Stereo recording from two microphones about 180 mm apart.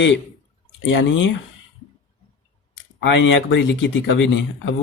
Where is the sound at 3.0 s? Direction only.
90° left.